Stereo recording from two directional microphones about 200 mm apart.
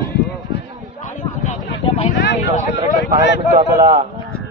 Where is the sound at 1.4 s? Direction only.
30° left (ahead or behind).